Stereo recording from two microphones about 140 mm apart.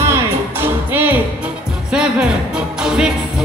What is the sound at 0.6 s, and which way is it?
Music, 15° right (ahead or behind).